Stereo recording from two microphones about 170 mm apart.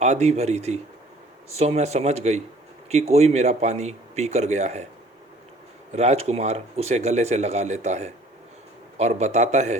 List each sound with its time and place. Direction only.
0.0 s speech: 40° right (ahead or behind)
5.9 s speech: 40° right (ahead or behind)